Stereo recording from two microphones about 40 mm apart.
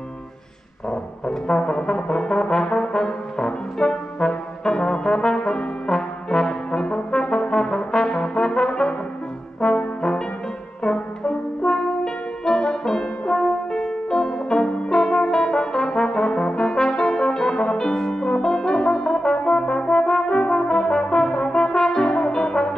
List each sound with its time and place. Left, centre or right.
1.2 s brass instrument: left
13.3 s music: centre
19.3 s brass instrument: centre